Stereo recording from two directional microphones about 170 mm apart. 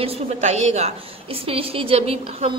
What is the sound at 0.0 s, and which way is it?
A woman's voice, 40° right (ahead or behind).